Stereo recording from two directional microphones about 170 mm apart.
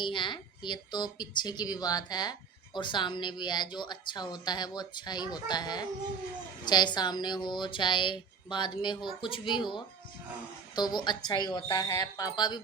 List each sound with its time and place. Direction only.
0.0 s a woman's voice: 30° left (ahead or behind)